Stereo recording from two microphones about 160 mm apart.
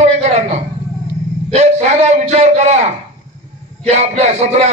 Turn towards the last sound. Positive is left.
turn(degrees=-40)  # may be behind; listen again after turning